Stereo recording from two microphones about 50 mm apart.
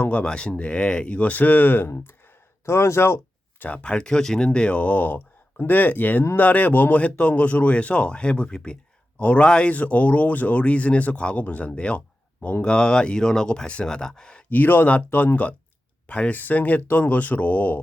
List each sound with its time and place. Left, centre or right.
0.0 s speech: left
2.6 s speech: left
3.8 s speech: centre
4.8 s speech: left; by 14.4 s centre
14.5 s speech: left
16.3 s speech: left